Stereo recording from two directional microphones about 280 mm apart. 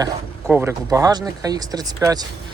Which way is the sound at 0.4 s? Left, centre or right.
Centre.